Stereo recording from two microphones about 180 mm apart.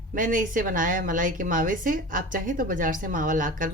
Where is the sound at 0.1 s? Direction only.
50° right (ahead or behind).